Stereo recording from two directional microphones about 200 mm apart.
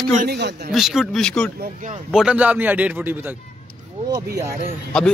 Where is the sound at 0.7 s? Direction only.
Centre (ahead or behind).